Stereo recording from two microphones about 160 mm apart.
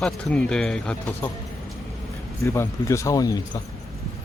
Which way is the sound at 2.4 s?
15° left (ahead or behind).